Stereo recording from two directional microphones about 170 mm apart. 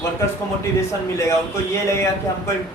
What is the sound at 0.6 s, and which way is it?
A man's voice, 15° left (ahead or behind).